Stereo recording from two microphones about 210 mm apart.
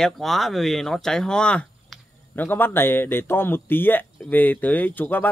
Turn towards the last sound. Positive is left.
turn(degrees=10)  # may be behind; listen again after turning